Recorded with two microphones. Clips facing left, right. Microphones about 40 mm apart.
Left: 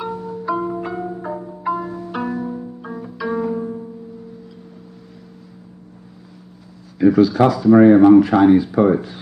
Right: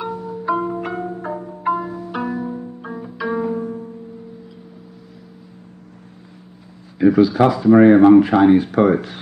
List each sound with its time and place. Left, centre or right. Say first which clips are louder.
0.0 s music: even; centre
0.4 s marimba: right 2 dB; right
0.8 s music: even; right
1.8 s music: even; centre
2.4 s music: even; centre
7.0 s speech: even; centre
8.5 s speech: even; right
8.9 s speech: even; right